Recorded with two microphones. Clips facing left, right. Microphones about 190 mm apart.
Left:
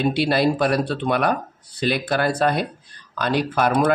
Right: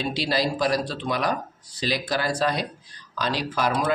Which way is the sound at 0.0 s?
60° left (ahead or behind).